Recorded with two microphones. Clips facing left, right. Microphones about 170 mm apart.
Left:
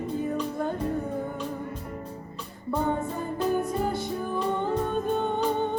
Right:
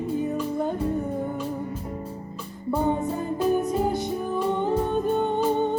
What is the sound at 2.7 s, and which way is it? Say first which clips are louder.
Music: right 3 dB; 15° right (ahead or behind).